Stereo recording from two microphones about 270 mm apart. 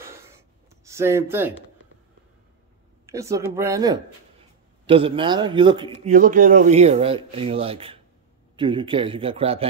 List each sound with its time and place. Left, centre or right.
0.8 s speech: centre
3.1 s a man's voice: centre
6.0 s speech: right